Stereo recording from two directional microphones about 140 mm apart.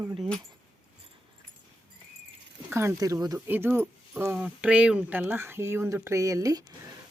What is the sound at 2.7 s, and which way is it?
Speech, 20° right (ahead or behind).